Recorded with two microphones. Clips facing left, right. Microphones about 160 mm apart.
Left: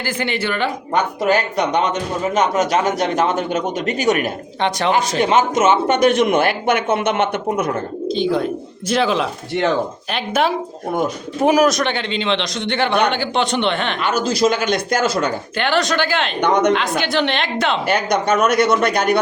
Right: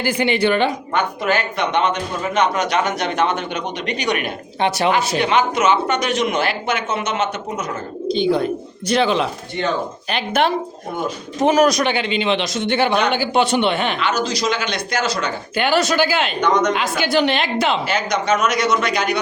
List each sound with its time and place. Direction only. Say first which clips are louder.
0.0 s a man's voice: right 4 dB; 15° right (ahead or behind)
0.9 s speech: left 4 dB; 40° left (ahead or behind); by 7.8 s 55° left (ahead or behind)
8.0 s a woman's voice: right 2 dB; centre (ahead or behind)
11.7 s a man's voice: right 1 dB; 5° right (ahead or behind)
14.0 s speech: left 3 dB; 50° left (ahead or behind)
15.5 s a woman's voice: right 3 dB; 5° right (ahead or behind)
16.4 s a man's voice: left 3 dB; 65° left (ahead or behind)
16.7 s a woman's voice: even; 5° right (ahead or behind)
17.8 s a man's voice: left 2 dB; 60° left (ahead or behind)